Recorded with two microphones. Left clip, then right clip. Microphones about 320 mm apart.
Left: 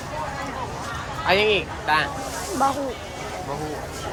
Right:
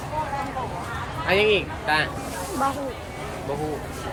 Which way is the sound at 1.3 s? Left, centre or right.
Centre.